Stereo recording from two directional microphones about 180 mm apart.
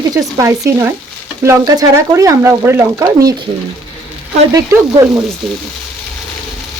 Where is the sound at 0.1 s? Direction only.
20° right (ahead or behind).